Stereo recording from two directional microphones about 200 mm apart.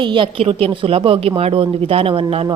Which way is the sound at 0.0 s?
25° right (ahead or behind).